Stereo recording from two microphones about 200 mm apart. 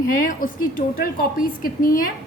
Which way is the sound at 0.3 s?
40° left (ahead or behind).